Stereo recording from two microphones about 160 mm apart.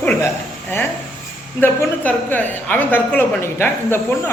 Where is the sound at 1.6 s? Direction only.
10° left (ahead or behind).